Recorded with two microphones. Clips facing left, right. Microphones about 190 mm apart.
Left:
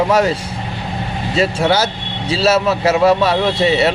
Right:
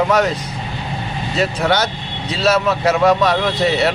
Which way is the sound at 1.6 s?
30° left (ahead or behind).